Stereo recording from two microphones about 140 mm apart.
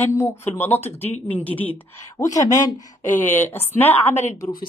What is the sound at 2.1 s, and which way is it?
Speech, 25° left (ahead or behind).